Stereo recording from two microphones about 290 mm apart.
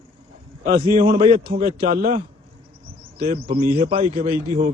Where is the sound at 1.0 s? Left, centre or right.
Centre.